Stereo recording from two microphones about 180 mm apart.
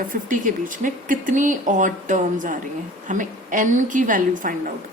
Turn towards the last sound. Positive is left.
turn(degrees=-50)  # may be behind; listen again after turning